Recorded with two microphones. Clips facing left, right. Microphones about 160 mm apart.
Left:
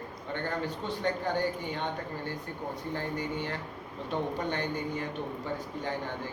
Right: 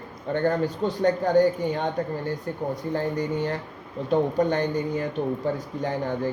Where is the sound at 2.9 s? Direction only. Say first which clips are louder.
Right 8 dB; 40° right (ahead or behind).